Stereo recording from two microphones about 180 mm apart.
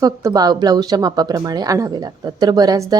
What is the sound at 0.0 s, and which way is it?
Speech, 20° right (ahead or behind).